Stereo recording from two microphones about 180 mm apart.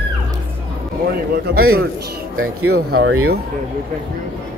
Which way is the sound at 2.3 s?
75° right (ahead or behind).